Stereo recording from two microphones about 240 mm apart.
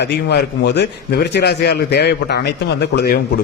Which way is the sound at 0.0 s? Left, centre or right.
Left.